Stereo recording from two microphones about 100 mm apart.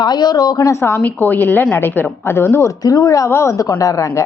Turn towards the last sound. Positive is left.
turn(degrees=35)  # may be behind; listen again after turning